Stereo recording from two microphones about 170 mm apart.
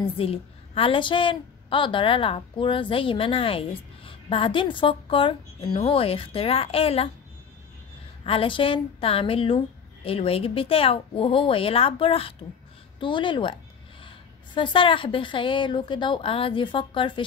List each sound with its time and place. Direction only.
0.0 s a woman's voice: 35° left (ahead or behind)
8.2 s a woman's voice: 35° left (ahead or behind)